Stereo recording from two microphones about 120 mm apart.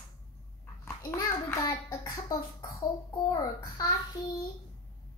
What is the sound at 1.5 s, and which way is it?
Child singing, 25° left (ahead or behind).